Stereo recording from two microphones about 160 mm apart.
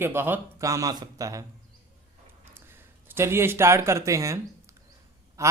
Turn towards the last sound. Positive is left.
turn(degrees=-20)  # may be behind; listen again after turning